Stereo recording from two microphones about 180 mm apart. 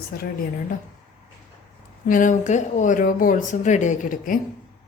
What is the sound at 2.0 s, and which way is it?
Speech, 45° left (ahead or behind).